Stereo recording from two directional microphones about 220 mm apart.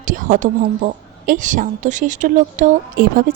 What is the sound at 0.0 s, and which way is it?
Speech, 35° right (ahead or behind).